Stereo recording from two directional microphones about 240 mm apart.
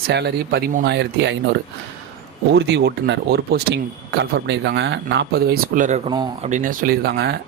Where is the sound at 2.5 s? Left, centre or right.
Right.